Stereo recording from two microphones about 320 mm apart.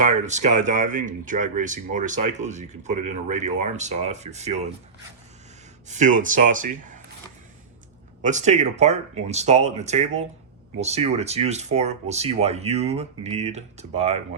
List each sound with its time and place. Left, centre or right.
0.0 s speech: right
5.9 s speech: right
8.2 s speech: right